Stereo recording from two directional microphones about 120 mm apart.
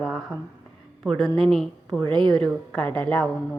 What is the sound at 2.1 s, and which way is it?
Speech, 40° right (ahead or behind).